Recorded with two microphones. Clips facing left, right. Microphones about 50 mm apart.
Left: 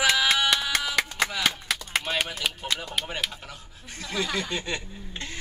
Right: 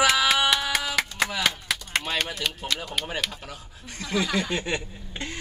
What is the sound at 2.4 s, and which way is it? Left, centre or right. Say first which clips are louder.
Speech: even; centre.